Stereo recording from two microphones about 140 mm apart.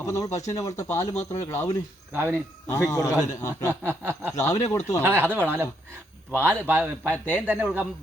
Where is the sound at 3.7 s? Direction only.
15° right (ahead or behind).